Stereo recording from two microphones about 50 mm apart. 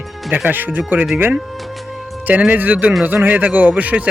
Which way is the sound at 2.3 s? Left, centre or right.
Right.